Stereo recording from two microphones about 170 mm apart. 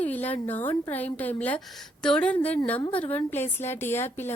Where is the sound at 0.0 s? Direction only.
10° left (ahead or behind).